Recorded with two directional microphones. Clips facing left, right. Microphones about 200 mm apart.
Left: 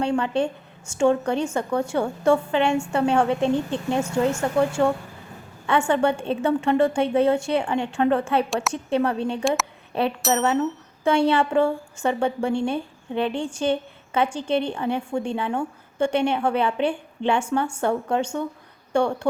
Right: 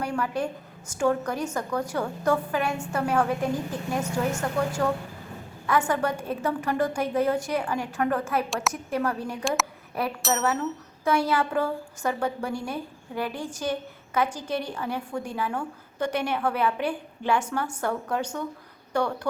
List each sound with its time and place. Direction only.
0.0 s a woman's voice: 25° left (ahead or behind)
5.9 s a woman's voice: 25° left (ahead or behind)